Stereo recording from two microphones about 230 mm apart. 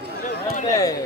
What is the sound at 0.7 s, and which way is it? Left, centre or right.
Speech, centre.